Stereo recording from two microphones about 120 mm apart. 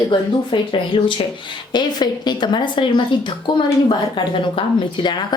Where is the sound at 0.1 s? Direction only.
45° left (ahead or behind).